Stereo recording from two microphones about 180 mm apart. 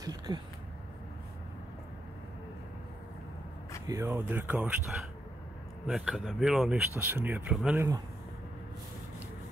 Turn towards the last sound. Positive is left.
turn(degrees=-5)  # may be behind; listen again after turning